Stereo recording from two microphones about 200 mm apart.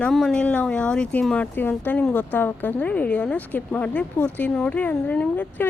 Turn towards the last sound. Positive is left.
turn(degrees=10)  # may be behind; listen again after turning